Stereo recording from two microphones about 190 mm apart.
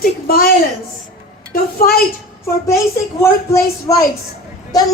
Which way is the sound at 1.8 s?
50° left (ahead or behind).